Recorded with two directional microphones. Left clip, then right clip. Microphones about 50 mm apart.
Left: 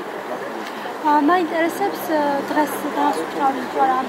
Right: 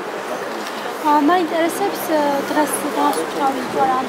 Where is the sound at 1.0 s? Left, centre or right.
Right.